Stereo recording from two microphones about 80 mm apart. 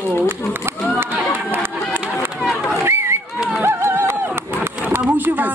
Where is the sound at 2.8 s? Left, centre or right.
Right.